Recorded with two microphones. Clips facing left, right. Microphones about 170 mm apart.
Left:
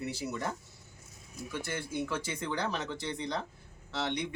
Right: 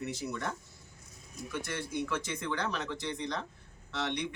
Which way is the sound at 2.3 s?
30° left (ahead or behind).